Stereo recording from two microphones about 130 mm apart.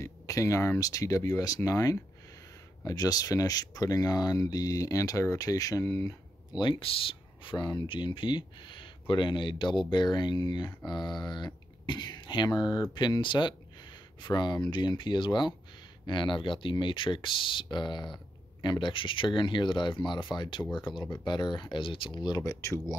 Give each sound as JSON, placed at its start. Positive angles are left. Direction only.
{"t": 0.0, "sound": "speech", "side_deg": 25}
{"t": 6.6, "sound": "speech", "side_deg": 40}